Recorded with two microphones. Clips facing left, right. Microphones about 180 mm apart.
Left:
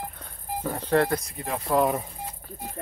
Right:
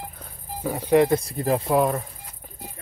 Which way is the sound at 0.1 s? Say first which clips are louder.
Left 3 dB; centre (ahead or behind).